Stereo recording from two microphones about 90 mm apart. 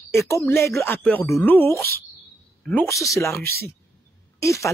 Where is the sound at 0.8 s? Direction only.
20° left (ahead or behind).